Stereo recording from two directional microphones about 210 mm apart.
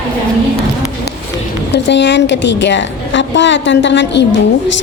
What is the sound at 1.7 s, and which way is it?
A woman's voice, 55° left (ahead or behind).